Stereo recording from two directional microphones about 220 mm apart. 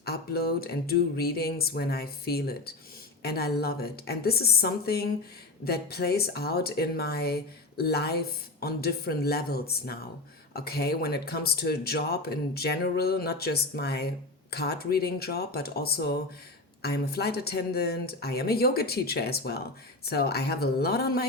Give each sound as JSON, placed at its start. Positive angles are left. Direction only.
{"t": 0.0, "sound": "speech", "side_deg": 45}